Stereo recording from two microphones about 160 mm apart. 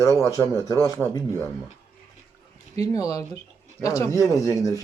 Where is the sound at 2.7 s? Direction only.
20° left (ahead or behind).